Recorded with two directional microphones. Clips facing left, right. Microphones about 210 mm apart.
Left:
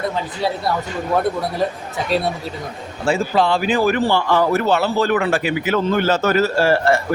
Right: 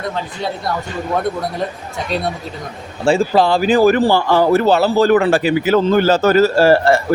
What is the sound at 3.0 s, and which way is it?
Speech, 30° right (ahead or behind).